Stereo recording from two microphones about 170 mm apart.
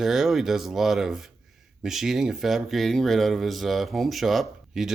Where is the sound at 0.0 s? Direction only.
Centre (ahead or behind).